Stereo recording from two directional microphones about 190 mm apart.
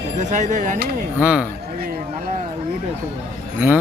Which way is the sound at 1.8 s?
50° right (ahead or behind).